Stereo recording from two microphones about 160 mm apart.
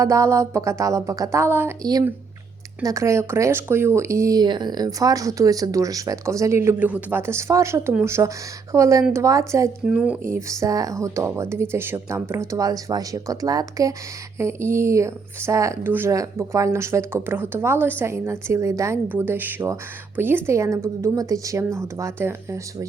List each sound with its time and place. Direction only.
0.0 s speech: 20° right (ahead or behind)
9.8 s speech: 5° right (ahead or behind)